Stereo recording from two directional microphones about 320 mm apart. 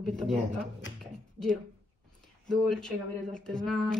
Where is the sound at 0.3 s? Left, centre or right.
Right.